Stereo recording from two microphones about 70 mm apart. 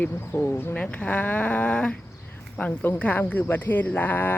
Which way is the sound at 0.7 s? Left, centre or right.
Centre.